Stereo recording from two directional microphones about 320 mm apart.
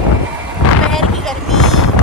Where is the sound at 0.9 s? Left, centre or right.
Centre.